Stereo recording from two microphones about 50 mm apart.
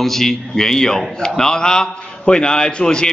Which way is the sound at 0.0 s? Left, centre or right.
Centre.